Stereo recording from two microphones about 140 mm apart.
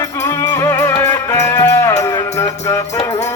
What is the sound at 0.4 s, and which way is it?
Music, 20° left (ahead or behind).